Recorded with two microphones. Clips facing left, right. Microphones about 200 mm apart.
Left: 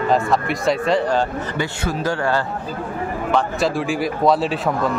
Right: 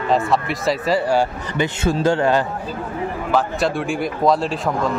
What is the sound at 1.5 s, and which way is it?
Speech, 25° right (ahead or behind).